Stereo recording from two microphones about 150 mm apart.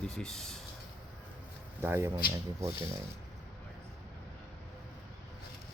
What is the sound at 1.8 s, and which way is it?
Speech, 15° right (ahead or behind).